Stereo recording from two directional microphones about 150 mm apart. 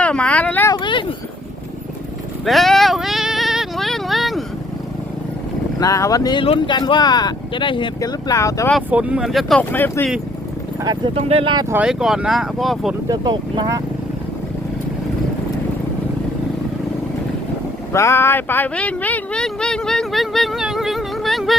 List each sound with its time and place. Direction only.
0.0 s a sound: 10° left (ahead or behind)
0.7 s a sound: 30° left (ahead or behind)
2.4 s a sound: centre (ahead or behind)
5.8 s speech: 20° left (ahead or behind)
8.9 s speech: 10° right (ahead or behind)
9.7 s speech: 15° left (ahead or behind)
10.8 s speech: 35° right (ahead or behind)
11.7 s speech: 5° right (ahead or behind)
13.1 s speech: 25° right (ahead or behind)
17.9 s speech: 15° left (ahead or behind); by 21.5 s centre (ahead or behind)